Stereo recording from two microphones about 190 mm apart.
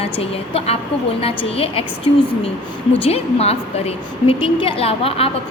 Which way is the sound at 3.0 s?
30° left (ahead or behind).